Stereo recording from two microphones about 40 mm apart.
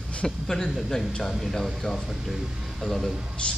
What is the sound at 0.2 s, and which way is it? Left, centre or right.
A man's voice, centre.